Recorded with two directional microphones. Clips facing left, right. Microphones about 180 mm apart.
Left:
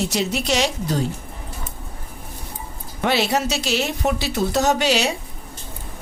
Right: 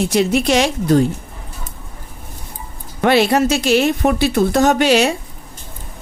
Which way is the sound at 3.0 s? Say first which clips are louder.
Right 7 dB; 55° right (ahead or behind).